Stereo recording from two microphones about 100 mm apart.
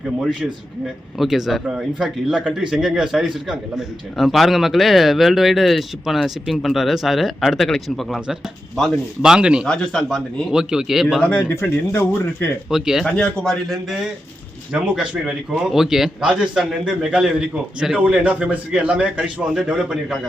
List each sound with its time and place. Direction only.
0.0 s speech: 5° right (ahead or behind)
9.3 s a man's voice: 10° right (ahead or behind)
9.6 s speech: 5° left (ahead or behind)
10.5 s speech: 5° right (ahead or behind)
11.2 s speech: 20° left (ahead or behind)
12.7 s speech: 5° right (ahead or behind)
13.1 s a man's voice: 5° left (ahead or behind)